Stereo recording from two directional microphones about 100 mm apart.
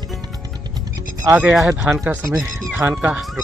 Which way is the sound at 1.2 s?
10° right (ahead or behind).